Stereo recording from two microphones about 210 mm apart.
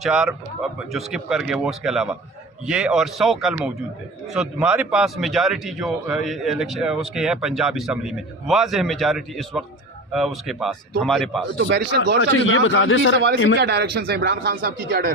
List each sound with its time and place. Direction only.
0.0 s a man's voice: centre (ahead or behind)
11.5 s speech: 55° right (ahead or behind)
12.5 s a man's voice: 70° left (ahead or behind)
13.6 s speech: 50° right (ahead or behind)